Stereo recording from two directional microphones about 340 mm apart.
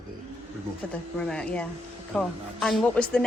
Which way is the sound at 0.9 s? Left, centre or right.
Centre.